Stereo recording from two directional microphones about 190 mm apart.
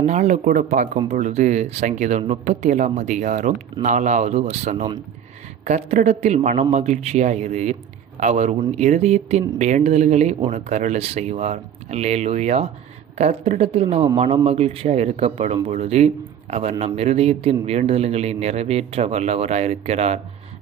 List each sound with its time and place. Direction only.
0.0 s a man's voice: 35° right (ahead or behind)